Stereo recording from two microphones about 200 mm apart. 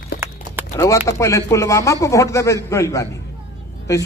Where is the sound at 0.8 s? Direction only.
15° left (ahead or behind).